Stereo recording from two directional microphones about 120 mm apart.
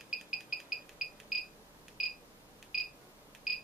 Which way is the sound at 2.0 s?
Centre (ahead or behind).